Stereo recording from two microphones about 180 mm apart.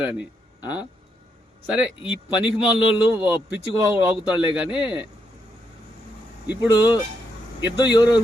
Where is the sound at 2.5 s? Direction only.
10° right (ahead or behind).